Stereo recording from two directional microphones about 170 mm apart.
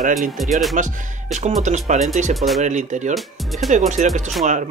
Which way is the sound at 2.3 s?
Centre (ahead or behind).